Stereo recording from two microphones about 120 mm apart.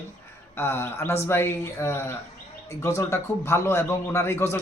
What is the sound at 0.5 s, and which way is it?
Speech, 20° left (ahead or behind).